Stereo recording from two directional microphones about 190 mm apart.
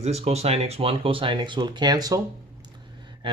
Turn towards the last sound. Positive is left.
turn(degrees=-25)  # may be behind; listen again after turning